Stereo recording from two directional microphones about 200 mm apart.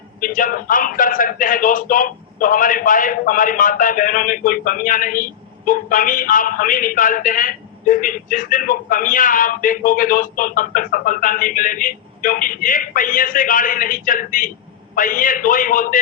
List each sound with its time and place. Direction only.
0.2 s speech: 45° left (ahead or behind)